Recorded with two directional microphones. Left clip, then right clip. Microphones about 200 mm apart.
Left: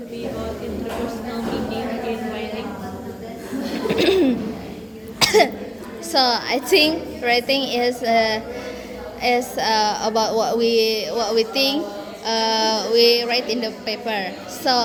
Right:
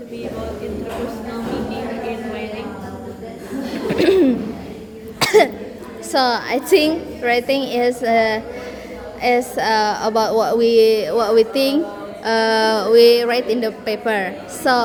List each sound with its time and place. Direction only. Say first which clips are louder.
3.8 s a sound: right 3 dB; 20° right (ahead or behind)
5.2 s cough: right 2 dB; 20° right (ahead or behind)
6.1 s a woman's voice: right 1 dB; 20° right (ahead or behind)